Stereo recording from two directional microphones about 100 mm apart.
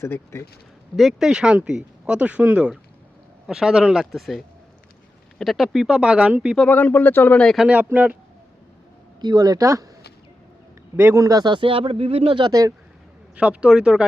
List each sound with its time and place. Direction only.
0.0 s speech: 25° left (ahead or behind)
0.9 s speech: 5° right (ahead or behind)
3.4 s speech: 5° right (ahead or behind)
6.7 s speech: 20° left (ahead or behind)
7.4 s speech: centre (ahead or behind)
7.9 s speech: 15° right (ahead or behind)
9.2 s speech: 45° right (ahead or behind)
10.9 s a man's voice: 20° right (ahead or behind)
11.2 s speech: 40° right (ahead or behind); by 12.5 s 55° right (ahead or behind)
13.3 s speech: 10° right (ahead or behind)